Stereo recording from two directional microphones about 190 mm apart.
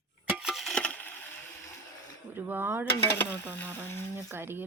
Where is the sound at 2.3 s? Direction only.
10° right (ahead or behind).